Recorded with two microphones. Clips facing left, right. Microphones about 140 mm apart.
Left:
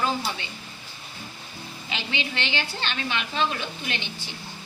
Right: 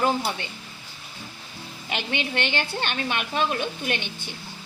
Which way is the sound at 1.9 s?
55° right (ahead or behind).